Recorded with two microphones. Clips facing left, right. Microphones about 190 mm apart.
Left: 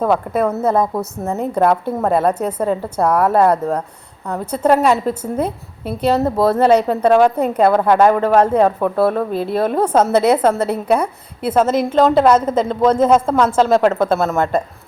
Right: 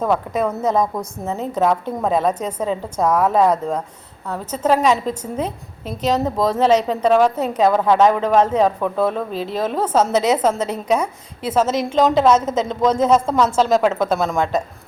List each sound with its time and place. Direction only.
0.0 s a woman's voice: 10° left (ahead or behind)
10.0 s a woman's voice: 60° left (ahead or behind)
10.6 s a woman's voice: 10° left (ahead or behind)